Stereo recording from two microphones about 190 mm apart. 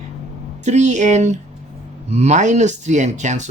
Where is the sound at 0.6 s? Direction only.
40° right (ahead or behind).